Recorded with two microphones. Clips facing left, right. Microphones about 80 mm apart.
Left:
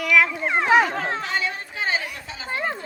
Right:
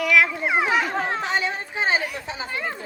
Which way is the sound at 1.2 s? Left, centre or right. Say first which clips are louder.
Right 2 dB; right.